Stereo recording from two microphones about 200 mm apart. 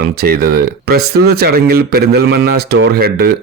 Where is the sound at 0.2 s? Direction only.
50° right (ahead or behind).